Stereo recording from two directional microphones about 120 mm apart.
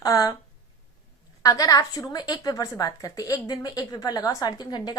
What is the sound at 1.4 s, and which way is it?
A woman's voice, 30° left (ahead or behind).